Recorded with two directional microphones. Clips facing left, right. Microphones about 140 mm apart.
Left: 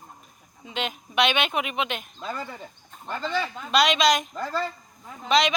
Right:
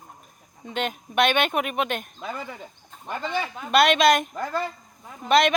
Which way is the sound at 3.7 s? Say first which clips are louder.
Right 3 dB; 55° right (ahead or behind).